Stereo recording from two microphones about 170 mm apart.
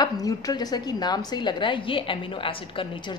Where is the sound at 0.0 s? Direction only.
20° left (ahead or behind).